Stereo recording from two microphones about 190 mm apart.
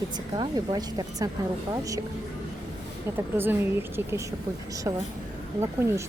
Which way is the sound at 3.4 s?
10° right (ahead or behind).